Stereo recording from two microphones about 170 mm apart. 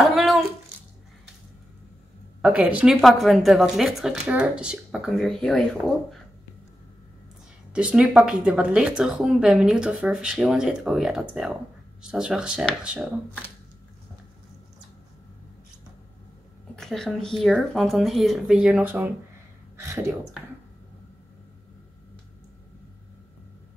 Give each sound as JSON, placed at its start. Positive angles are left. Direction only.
{"t": 0.0, "sound": "a sound", "side_deg": 0}
{"t": 2.4, "sound": "speech", "side_deg": -10}
{"t": 7.7, "sound": "speech", "side_deg": -5}
{"t": 16.7, "sound": "speech", "side_deg": 5}